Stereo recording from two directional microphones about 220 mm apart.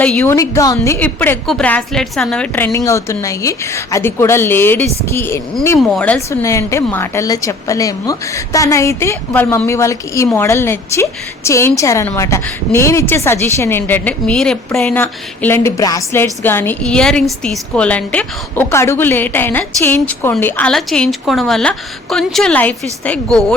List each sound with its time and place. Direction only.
0.0 s a woman's voice: 5° left (ahead or behind)